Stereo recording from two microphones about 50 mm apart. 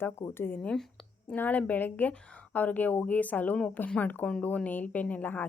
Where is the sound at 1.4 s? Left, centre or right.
Left.